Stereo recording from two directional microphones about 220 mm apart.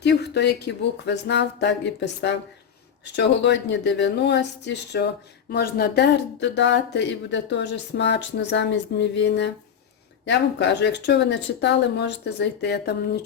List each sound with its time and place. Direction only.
0.0 s speech: 50° left (ahead or behind)